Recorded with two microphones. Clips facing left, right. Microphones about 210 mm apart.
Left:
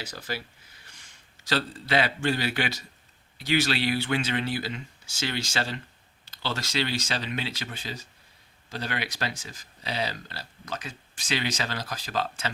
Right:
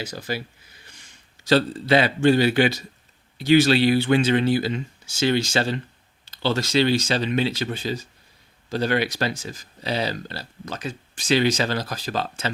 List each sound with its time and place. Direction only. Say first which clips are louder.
0.0 s speech: right 6 dB; 15° right (ahead or behind)
1.5 s speech: right 9 dB; 25° right (ahead or behind)